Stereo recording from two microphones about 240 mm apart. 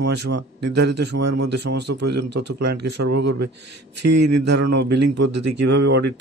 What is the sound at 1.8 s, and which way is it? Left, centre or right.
Speech, right.